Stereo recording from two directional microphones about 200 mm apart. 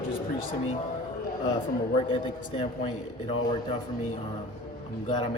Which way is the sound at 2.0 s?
25° left (ahead or behind).